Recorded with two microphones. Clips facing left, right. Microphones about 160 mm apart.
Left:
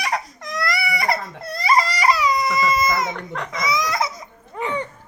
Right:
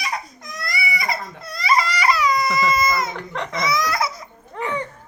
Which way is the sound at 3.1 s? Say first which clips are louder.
Right 2 dB; 5° left (ahead or behind).